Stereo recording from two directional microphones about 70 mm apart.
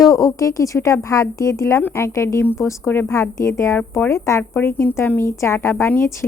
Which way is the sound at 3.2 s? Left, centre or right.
Left.